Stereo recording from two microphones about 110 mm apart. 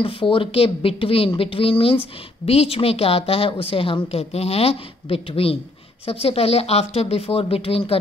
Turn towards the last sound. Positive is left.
turn(degrees=60)  # may be behind; listen again after turning